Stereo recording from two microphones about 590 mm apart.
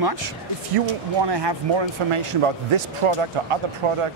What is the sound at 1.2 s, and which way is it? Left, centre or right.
Speech, right.